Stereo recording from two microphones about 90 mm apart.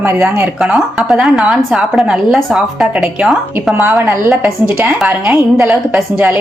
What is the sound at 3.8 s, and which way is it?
Speech, 30° right (ahead or behind).